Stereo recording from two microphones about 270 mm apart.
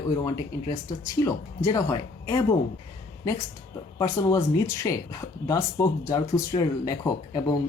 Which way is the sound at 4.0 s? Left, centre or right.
Centre.